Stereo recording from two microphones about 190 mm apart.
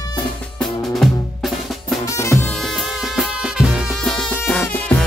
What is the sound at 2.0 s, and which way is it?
Music, 15° left (ahead or behind).